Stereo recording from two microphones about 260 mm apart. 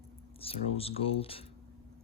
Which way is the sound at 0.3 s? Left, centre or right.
Left.